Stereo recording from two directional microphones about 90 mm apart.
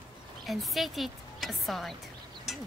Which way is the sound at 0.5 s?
Centre (ahead or behind).